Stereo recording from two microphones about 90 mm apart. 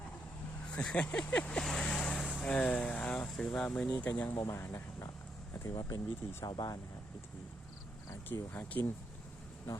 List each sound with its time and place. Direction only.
0.7 s speech: 10° left (ahead or behind)
4.4 s speech: 35° left (ahead or behind)
5.6 s speech: 40° left (ahead or behind)
8.4 s speech: 20° left (ahead or behind)